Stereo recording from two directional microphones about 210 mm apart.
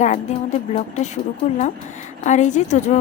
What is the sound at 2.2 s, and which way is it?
Speech, 35° left (ahead or behind).